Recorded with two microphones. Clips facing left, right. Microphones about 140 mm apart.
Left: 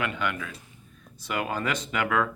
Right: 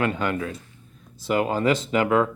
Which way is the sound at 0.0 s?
35° right (ahead or behind).